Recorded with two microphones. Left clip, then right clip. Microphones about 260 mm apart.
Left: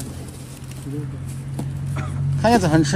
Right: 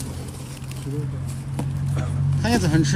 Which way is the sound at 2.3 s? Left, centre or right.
Centre.